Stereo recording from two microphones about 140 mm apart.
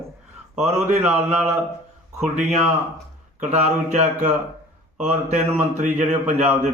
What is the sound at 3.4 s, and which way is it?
A man's voice, 55° right (ahead or behind).